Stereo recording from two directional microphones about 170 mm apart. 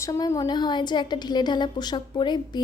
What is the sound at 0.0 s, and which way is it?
A woman's voice, 20° left (ahead or behind).